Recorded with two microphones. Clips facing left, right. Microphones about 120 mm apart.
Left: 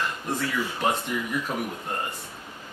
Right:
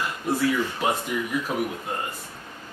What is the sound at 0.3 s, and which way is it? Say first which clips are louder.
Speech: right 6 dB; 10° right (ahead or behind).